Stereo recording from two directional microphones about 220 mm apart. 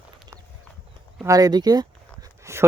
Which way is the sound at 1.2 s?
15° right (ahead or behind).